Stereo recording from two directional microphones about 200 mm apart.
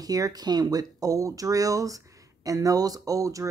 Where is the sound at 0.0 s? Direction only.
20° right (ahead or behind).